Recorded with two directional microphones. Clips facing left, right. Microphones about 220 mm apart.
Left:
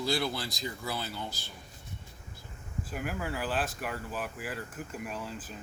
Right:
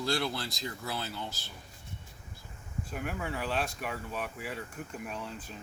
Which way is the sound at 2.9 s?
Centre (ahead or behind).